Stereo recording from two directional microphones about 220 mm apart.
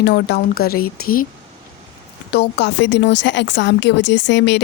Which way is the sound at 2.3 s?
50° left (ahead or behind).